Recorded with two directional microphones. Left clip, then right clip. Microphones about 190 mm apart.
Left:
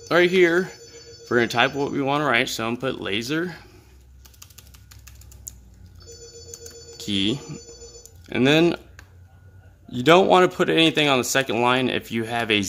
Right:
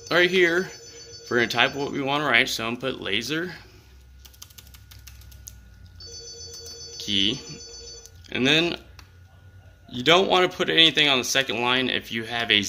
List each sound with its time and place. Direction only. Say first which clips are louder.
0.1 s speech: left 2 dB; 50° left (ahead or behind)
7.1 s speech: right 1 dB; 50° left (ahead or behind)
9.8 s speech: left 3 dB; 50° left (ahead or behind)